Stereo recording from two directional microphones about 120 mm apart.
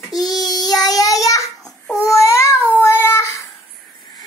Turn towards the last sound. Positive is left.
turn(degrees=25)  # may be behind; listen again after turning